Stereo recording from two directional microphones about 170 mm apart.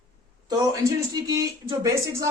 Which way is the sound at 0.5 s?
20° right (ahead or behind).